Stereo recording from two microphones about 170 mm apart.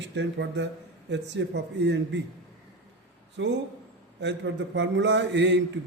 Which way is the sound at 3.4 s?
90° right.